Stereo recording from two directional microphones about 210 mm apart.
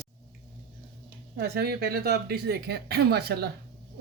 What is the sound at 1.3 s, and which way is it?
Speech, 50° right (ahead or behind).